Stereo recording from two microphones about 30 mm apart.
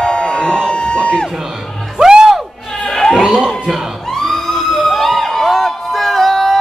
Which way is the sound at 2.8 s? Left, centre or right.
Centre.